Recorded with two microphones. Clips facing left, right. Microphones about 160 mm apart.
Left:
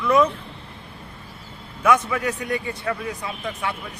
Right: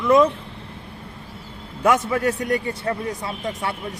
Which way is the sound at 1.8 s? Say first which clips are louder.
Right 1 dB; 40° right (ahead or behind).